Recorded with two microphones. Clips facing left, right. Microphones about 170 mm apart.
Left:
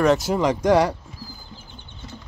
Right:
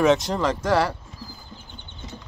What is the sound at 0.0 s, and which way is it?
Speech, centre (ahead or behind).